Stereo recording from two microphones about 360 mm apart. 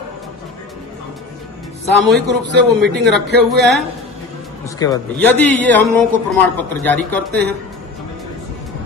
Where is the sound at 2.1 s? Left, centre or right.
Right.